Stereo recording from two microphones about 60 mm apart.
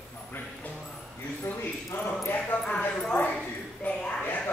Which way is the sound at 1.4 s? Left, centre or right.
Left.